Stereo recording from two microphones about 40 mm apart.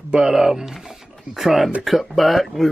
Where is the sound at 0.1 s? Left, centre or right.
Centre.